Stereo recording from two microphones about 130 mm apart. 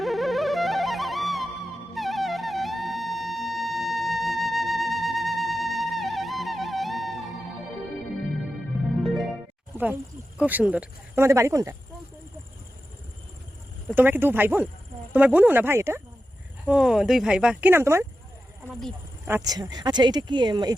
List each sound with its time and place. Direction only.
0.0 s music: centre (ahead or behind)
9.7 s speech: 15° right (ahead or behind)
13.9 s speech: 15° right (ahead or behind)
16.6 s speech: 5° right (ahead or behind)
19.5 s speech: 30° right (ahead or behind)